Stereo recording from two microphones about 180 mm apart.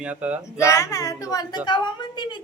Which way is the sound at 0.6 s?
15° left (ahead or behind).